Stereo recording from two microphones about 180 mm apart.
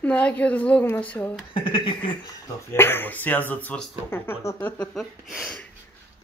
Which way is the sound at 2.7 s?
15° left (ahead or behind).